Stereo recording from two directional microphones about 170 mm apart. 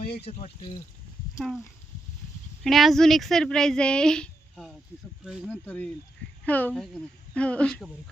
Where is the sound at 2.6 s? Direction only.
Centre (ahead or behind).